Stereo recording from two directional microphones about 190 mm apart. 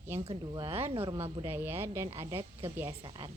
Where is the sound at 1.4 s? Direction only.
10° right (ahead or behind).